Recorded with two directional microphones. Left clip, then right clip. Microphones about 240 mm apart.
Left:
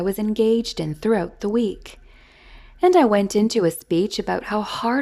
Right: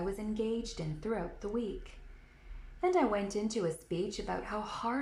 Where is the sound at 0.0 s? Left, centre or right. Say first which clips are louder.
Left 15 dB; left.